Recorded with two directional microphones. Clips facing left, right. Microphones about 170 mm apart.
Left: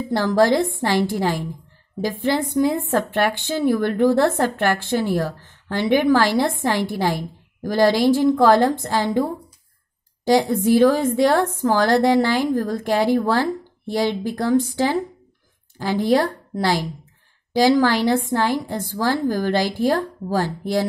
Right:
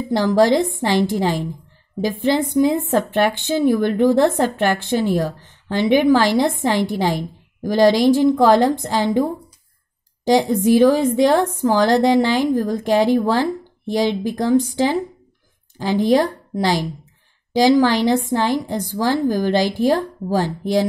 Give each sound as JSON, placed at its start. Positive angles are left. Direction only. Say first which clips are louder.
{"t": 0.1, "sound": "a woman's voice", "louder": "right 2 dB", "side_deg": -15}